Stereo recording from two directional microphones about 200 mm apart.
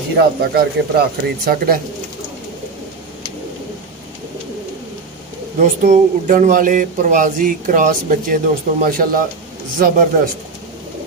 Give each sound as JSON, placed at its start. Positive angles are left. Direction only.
{"t": 0.1, "sound": "speech", "side_deg": -50}
{"t": 5.6, "sound": "speech", "side_deg": -40}